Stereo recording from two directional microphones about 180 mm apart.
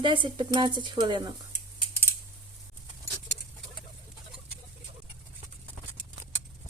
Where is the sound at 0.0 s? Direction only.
25° right (ahead or behind).